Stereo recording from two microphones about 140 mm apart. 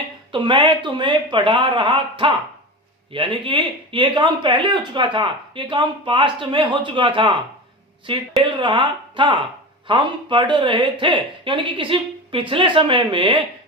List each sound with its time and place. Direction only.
0.3 s speech: 35° right (ahead or behind)